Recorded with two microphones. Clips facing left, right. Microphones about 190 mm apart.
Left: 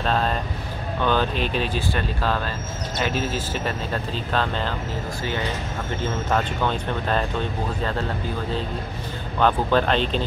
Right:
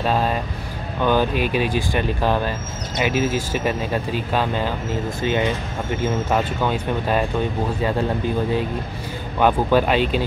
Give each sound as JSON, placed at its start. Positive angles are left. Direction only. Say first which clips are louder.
{"t": 0.0, "sound": "speech", "louder": "right 3 dB", "side_deg": -10}
{"t": 9.4, "sound": "speech", "louder": "right 3 dB", "side_deg": -10}